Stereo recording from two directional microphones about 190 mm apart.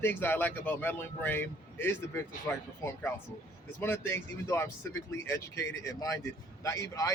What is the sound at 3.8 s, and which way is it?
A man's voice, 10° left (ahead or behind).